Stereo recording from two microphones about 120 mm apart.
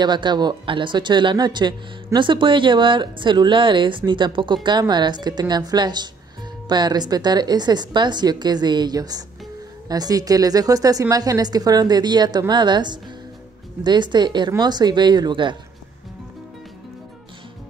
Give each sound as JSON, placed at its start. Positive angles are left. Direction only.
{"t": 0.0, "sound": "a woman's voice", "side_deg": -40}